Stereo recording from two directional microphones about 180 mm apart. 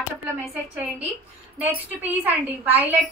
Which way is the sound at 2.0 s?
10° right (ahead or behind).